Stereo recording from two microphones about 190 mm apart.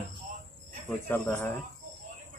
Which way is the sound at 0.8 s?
5° left (ahead or behind).